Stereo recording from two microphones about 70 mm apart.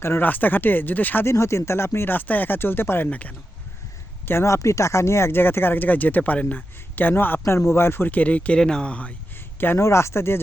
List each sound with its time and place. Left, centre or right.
0.0 s speech: left
0.3 s speech: left
1.3 s speech: left
3.1 s speech: left
4.3 s speech: left; by 6.7 s centre
6.9 s speech: left
7.4 s speech: left; by 9.1 s centre
9.7 s speech: left